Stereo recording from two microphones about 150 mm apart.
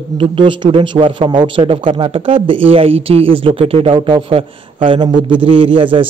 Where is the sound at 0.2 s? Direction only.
35° right (ahead or behind).